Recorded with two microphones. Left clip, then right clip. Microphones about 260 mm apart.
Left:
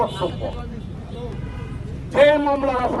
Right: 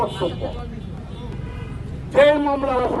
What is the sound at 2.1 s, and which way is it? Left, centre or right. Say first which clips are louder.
Speech: even; left.